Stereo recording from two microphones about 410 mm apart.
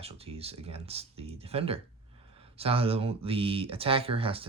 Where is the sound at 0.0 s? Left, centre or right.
Centre.